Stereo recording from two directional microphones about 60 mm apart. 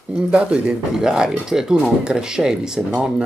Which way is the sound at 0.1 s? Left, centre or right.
Centre.